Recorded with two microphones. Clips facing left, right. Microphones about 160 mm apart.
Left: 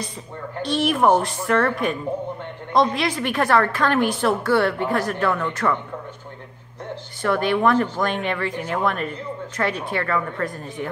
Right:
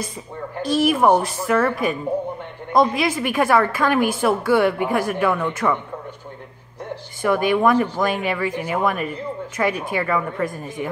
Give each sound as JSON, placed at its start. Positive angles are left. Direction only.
{"t": 0.7, "sound": "a woman's voice", "side_deg": -5}
{"t": 7.2, "sound": "a woman's voice", "side_deg": -10}